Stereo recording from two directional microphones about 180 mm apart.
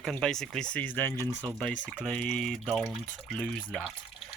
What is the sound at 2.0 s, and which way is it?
Speech, centre (ahead or behind).